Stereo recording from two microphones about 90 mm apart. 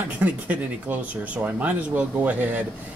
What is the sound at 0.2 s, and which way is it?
Speech, 20° right (ahead or behind).